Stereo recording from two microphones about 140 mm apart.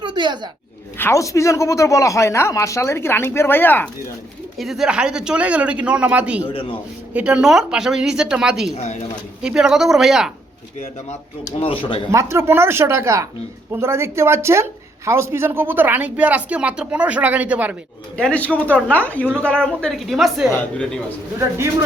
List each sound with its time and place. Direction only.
0.0 s a sound: 35° right (ahead or behind)
0.9 s speech: 20° left (ahead or behind)
4.5 s speech: centre (ahead or behind)
6.5 s speech: 40° left (ahead or behind)
7.1 s a woman's voice: 10° right (ahead or behind)
8.7 s speech: 50° left (ahead or behind)
9.4 s a woman's voice: 5° right (ahead or behind)
11.6 s speech: 40° left (ahead or behind)
12.1 s speech: 20° right (ahead or behind)
18.2 s a woman's voice: 10° left (ahead or behind)